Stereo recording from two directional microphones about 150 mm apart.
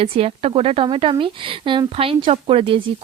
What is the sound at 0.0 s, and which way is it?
A woman's voice, 40° right (ahead or behind).